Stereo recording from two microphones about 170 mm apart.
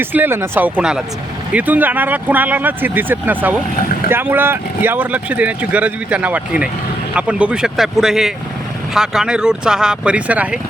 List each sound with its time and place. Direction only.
0.0 s speech: 10° right (ahead or behind)